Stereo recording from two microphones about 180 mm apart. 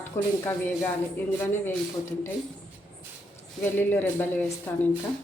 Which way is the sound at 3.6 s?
10° left (ahead or behind).